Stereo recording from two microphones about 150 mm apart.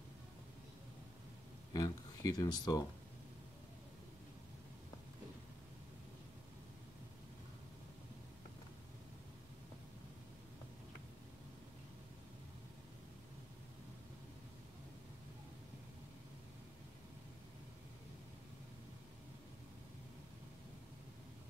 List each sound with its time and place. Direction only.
1.7 s speech: 25° left (ahead or behind)